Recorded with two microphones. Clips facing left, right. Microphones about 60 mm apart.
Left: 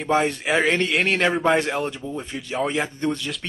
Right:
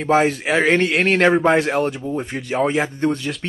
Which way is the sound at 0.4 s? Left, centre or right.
Centre.